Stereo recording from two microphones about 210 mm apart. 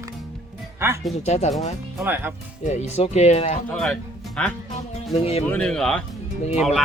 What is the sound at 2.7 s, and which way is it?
Speech, 30° left (ahead or behind).